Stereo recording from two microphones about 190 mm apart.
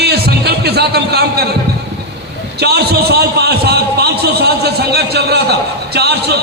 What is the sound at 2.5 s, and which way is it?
A man's voice, 60° right (ahead or behind).